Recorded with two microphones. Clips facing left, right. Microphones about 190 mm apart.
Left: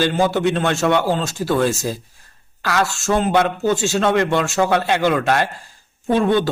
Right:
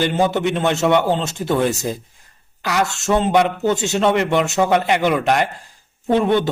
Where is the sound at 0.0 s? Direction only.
20° right (ahead or behind).